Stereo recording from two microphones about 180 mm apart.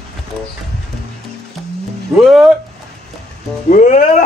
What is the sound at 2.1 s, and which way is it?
Speech, centre (ahead or behind).